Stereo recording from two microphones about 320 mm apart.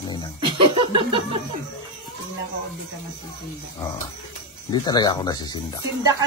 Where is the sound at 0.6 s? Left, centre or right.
Centre.